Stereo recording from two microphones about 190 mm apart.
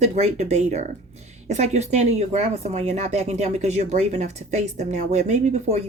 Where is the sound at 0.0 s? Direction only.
35° right (ahead or behind).